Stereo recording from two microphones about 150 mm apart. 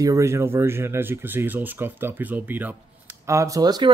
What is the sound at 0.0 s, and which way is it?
Speech, 20° right (ahead or behind).